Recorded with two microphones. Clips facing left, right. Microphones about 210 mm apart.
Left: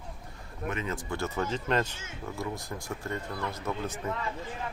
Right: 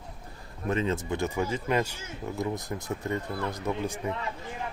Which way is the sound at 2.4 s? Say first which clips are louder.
Right 5 dB; 20° right (ahead or behind).